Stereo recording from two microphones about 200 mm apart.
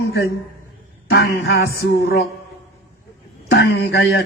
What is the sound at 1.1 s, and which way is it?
Music, 50° left (ahead or behind).